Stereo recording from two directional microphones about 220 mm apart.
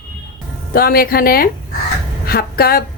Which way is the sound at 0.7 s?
40° left (ahead or behind).